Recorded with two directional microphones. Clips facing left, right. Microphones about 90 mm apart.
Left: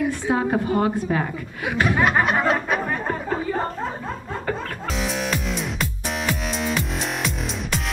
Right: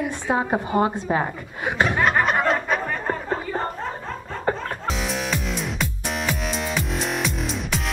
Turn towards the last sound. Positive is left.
turn(degrees=0)  # may be behind; listen again after turning